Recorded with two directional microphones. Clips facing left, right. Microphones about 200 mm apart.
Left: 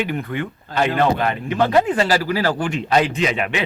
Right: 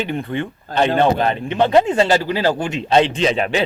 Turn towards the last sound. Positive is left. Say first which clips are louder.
# right 3 dB
turn(degrees=-30)  # may be behind; listen again after turning